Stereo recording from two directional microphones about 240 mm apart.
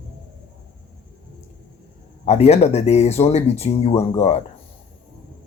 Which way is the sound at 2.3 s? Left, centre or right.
Left.